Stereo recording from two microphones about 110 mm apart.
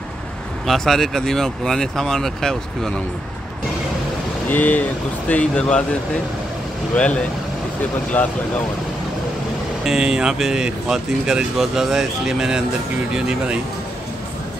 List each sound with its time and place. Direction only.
0.7 s speech: centre (ahead or behind)
4.5 s speech: 15° left (ahead or behind)
8.2 s speech: 20° left (ahead or behind)
9.8 s speech: 5° right (ahead or behind)